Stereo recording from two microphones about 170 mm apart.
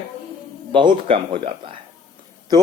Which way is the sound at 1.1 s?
30° right (ahead or behind).